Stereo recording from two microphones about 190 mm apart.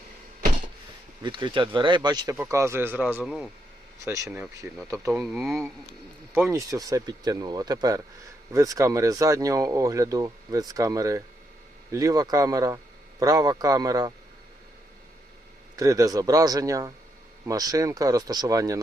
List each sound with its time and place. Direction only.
1.2 s speech: 25° right (ahead or behind); by 3.5 s 5° right (ahead or behind)
4.0 s speech: 15° right (ahead or behind)
5.4 s speech: centre (ahead or behind)
6.3 s speech: 15° right (ahead or behind)
15.7 s speech: 15° right (ahead or behind)